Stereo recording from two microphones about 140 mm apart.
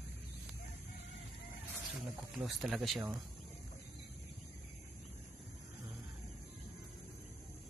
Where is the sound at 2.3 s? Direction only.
Centre (ahead or behind).